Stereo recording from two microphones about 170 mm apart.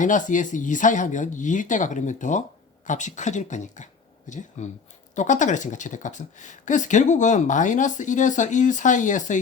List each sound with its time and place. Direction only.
0.0 s speech: 50° left (ahead or behind)